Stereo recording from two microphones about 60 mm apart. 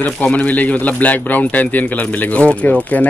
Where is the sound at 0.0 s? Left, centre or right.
Left.